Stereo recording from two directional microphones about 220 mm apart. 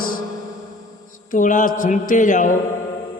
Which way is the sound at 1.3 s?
35° left (ahead or behind).